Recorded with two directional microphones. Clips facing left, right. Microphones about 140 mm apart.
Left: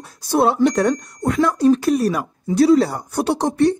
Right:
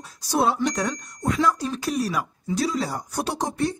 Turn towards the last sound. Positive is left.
turn(degrees=65)  # may be behind; listen again after turning